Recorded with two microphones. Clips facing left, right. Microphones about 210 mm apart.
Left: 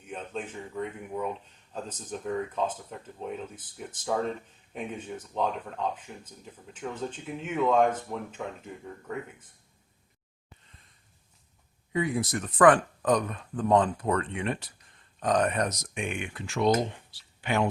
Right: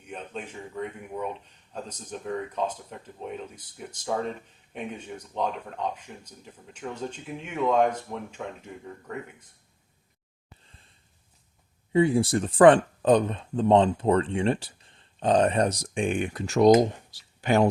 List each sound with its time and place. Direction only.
0.0 s speech: centre (ahead or behind)
7.4 s speech: 5° left (ahead or behind)
10.6 s a sound: 30° right (ahead or behind)
11.9 s speech: 30° right (ahead or behind)